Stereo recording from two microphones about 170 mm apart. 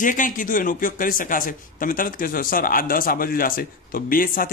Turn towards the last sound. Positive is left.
turn(degrees=55)  # may be behind; listen again after turning